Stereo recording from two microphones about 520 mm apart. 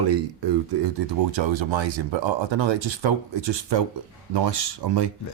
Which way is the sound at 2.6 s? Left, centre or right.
Right.